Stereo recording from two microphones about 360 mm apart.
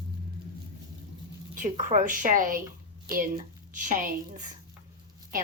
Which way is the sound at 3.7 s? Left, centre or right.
Right.